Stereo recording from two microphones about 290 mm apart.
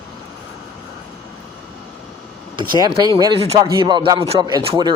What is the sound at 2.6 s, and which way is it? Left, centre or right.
Speech, centre.